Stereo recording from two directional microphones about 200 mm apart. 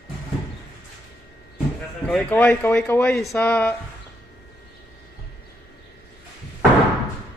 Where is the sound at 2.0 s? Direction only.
5° left (ahead or behind).